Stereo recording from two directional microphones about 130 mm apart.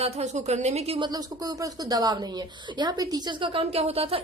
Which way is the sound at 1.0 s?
30° right (ahead or behind).